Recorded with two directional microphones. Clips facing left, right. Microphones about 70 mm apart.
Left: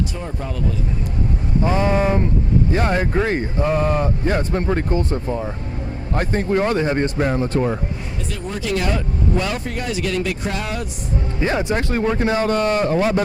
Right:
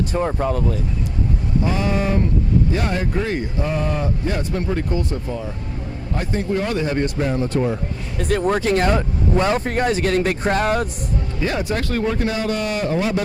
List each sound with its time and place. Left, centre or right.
0.1 s speech: right
1.6 s speech: left
8.3 s speech: right
11.3 s speech: left